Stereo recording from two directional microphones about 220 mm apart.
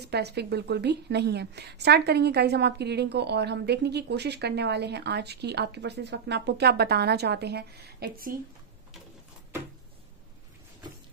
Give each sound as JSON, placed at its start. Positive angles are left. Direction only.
{"t": 0.0, "sound": "a woman's voice", "side_deg": -50}